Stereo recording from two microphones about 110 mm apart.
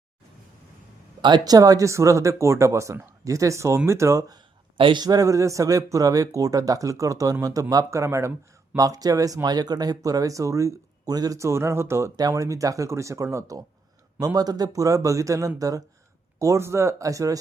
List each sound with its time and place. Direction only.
1.2 s speech: 40° right (ahead or behind)
4.4 s a sound: 45° right (ahead or behind)
5.0 s speech: 35° right (ahead or behind)